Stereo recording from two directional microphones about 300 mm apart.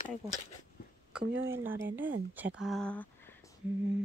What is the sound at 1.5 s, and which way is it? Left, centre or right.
Speech, centre.